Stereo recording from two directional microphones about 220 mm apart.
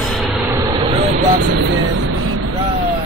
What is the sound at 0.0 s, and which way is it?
Vehicle, centre (ahead or behind).